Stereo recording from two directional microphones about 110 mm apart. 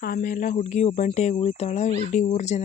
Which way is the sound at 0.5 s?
90° left.